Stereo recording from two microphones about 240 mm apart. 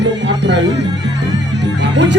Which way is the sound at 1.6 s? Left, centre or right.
Right.